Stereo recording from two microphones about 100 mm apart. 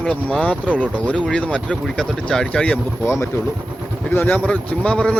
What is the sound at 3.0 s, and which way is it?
Speech, 25° left (ahead or behind).